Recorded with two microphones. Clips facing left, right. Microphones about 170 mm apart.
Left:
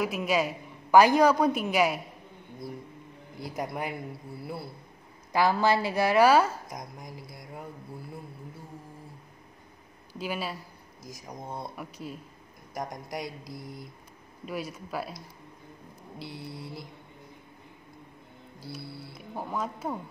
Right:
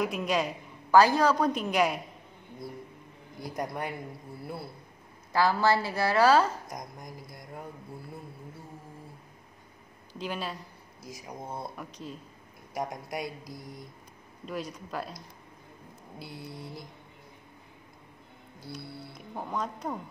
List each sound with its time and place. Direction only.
0.0 s a man's voice: 5° left (ahead or behind)
3.5 s speech: 5° left (ahead or behind)
5.3 s a woman's voice: 15° left (ahead or behind)
6.7 s speech: centre (ahead or behind)
10.1 s a woman's voice: 5° left (ahead or behind)
11.2 s speech: 5° right (ahead or behind)
11.7 s a woman's voice: 10° left (ahead or behind)
12.7 s speech: 5° right (ahead or behind)
14.4 s a woman's voice: 5° left (ahead or behind)
19.1 s a woman's voice: 5° left (ahead or behind)